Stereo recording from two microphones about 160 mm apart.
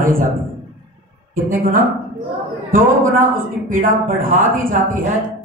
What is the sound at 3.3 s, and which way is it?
A man's voice, 60° right (ahead or behind).